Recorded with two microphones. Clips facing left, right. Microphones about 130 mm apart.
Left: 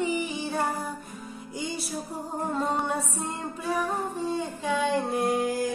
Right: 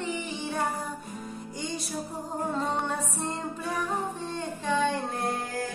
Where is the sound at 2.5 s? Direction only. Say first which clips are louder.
Left 3 dB; 10° left (ahead or behind).